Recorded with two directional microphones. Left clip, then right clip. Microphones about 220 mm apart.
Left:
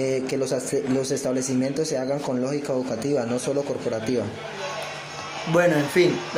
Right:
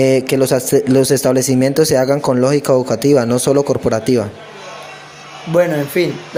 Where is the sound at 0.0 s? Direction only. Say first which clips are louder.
Right 12 dB; 40° right (ahead or behind).